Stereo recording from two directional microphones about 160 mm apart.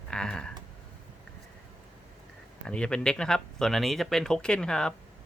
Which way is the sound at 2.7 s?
5° left (ahead or behind).